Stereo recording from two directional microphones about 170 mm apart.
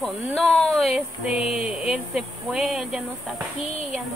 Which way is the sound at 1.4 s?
35° left (ahead or behind).